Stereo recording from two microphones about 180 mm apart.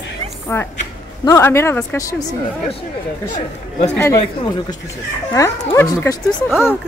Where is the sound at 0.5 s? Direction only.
15° left (ahead or behind).